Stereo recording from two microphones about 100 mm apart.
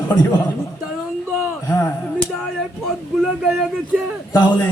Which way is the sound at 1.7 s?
25° left (ahead or behind).